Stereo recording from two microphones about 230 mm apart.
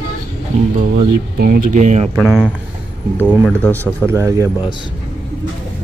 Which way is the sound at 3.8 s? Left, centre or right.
Centre.